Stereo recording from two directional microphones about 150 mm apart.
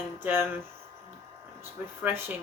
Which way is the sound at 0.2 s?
15° right (ahead or behind).